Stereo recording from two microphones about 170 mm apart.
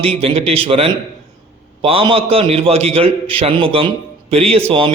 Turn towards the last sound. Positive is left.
turn(degrees=-30)  # may be behind; listen again after turning